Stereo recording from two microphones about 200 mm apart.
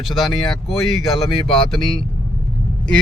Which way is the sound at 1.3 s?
25° left (ahead or behind).